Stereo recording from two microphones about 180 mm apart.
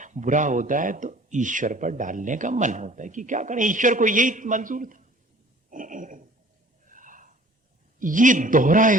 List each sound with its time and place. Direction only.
0.0 s speech: 45° right (ahead or behind)
5.7 s a sound: 45° right (ahead or behind)
6.8 s snort: 45° right (ahead or behind)
7.9 s speech: 50° right (ahead or behind)